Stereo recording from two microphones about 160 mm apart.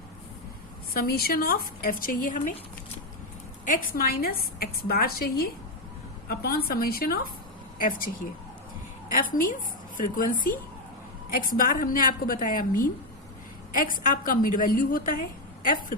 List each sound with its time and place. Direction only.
0.9 s a woman's voice: 75° left (ahead or behind); by 2.5 s 55° left (ahead or behind)
3.7 s a woman's voice: 60° left (ahead or behind)
9.1 s a woman's voice: 60° left (ahead or behind)